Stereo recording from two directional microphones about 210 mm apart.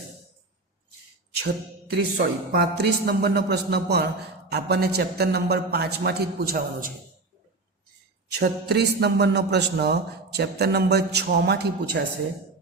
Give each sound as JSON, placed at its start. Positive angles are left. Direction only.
{"t": 1.4, "sound": "a man's voice", "side_deg": -50}
{"t": 8.4, "sound": "a man's voice", "side_deg": -50}